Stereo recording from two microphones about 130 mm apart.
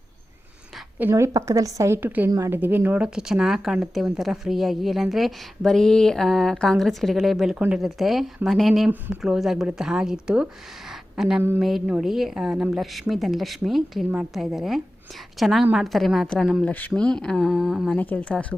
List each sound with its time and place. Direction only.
0.9 s a woman's voice: 20° right (ahead or behind)
17.9 s speech: 15° left (ahead or behind)